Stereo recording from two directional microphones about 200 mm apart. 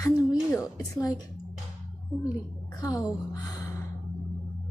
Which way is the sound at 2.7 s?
15° left (ahead or behind).